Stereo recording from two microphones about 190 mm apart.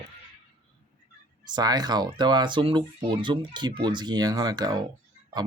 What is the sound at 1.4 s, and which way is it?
Speech, 20° right (ahead or behind).